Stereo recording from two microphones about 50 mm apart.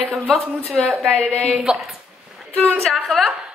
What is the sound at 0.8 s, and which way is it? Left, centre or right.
Speech, centre.